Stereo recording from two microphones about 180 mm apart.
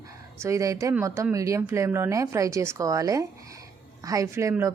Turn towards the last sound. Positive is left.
turn(degrees=-20)  # may be behind; listen again after turning